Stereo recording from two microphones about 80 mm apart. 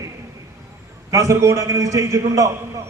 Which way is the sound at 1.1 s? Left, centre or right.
Right.